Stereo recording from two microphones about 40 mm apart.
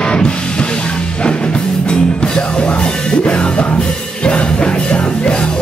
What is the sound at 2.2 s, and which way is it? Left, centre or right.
Music, left.